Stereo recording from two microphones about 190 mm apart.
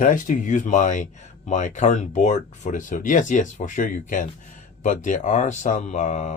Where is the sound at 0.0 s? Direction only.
45° left (ahead or behind).